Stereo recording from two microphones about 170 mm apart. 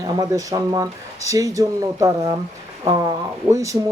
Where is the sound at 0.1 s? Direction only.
20° right (ahead or behind).